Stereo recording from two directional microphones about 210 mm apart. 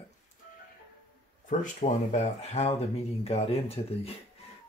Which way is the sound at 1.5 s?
35° left (ahead or behind).